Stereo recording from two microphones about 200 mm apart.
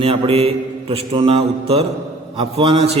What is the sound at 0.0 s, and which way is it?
Mantra, 30° right (ahead or behind).